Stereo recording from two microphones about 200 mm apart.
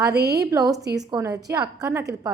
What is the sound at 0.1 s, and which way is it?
Speech, 55° right (ahead or behind).